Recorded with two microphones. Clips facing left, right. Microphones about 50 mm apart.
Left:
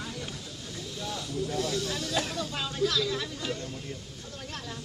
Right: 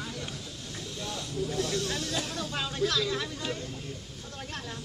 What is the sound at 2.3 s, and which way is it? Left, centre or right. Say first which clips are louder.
Speech: even; centre.